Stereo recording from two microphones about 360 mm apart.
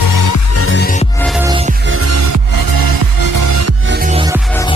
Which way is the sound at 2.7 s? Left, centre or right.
Right.